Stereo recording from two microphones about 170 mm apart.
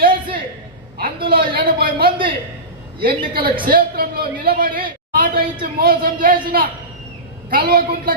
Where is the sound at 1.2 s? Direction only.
65° right (ahead or behind).